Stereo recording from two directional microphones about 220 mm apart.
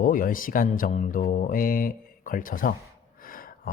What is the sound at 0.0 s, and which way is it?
Speech, 40° left (ahead or behind).